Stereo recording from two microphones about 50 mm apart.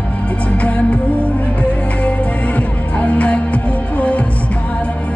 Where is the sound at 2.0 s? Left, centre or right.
Left.